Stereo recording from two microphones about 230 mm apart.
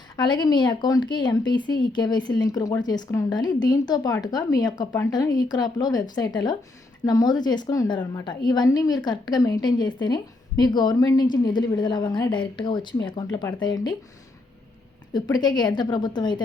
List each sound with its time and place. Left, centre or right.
0.2 s a woman's voice: centre
15.1 s a woman's voice: centre